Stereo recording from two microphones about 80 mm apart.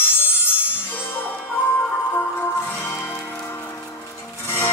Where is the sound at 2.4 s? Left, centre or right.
Left.